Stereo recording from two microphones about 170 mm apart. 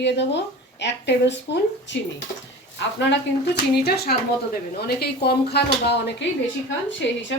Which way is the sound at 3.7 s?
70° left (ahead or behind).